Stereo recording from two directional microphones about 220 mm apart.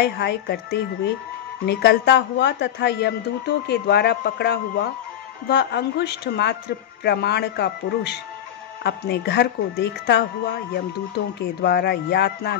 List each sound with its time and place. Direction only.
0.0 s speech: 50° left (ahead or behind)